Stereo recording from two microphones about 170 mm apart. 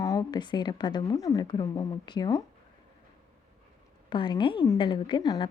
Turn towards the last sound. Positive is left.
turn(degrees=25)  # may be behind; listen again after turning